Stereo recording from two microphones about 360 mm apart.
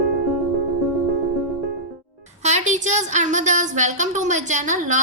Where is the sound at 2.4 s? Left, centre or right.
Centre.